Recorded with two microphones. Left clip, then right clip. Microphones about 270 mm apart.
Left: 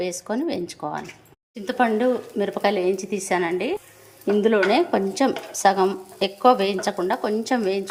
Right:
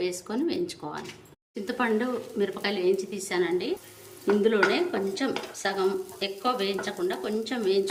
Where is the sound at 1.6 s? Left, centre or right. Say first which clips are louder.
Left 7 dB; centre.